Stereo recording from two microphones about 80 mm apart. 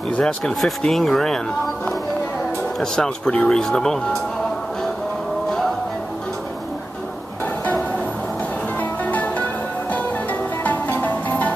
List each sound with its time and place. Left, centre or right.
0.1 s speech: centre
2.8 s speech: centre
9.1 s music: left
10.6 s music: centre